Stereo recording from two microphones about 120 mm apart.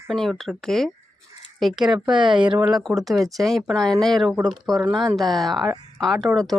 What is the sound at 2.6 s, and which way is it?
Speech, 5° right (ahead or behind).